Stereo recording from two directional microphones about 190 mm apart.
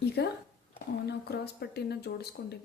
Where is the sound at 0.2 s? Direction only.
60° left (ahead or behind).